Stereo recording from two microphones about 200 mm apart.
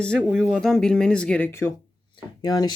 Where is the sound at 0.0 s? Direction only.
5° left (ahead or behind).